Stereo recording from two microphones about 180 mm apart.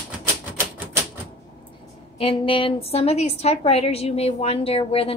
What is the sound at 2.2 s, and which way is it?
A woman's voice, 30° left (ahead or behind).